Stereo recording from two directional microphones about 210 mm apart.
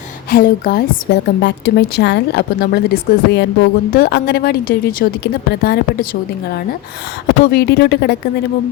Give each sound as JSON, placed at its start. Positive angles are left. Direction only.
{"t": 0.3, "sound": "a woman's voice", "side_deg": 45}
{"t": 7.5, "sound": "a woman's voice", "side_deg": 50}